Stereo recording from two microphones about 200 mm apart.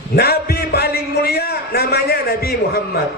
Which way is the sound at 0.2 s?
50° left (ahead or behind).